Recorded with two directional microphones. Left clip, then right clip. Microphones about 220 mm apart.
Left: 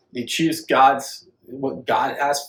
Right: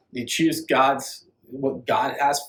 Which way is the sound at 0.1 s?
15° left (ahead or behind).